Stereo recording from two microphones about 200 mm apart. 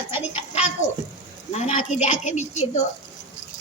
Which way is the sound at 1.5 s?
35° left (ahead or behind).